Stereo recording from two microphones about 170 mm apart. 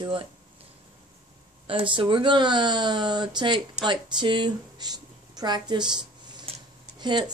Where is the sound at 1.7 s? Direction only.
30° right (ahead or behind).